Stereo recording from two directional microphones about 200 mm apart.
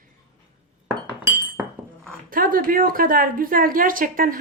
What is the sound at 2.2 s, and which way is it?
A woman's voice, 45° right (ahead or behind).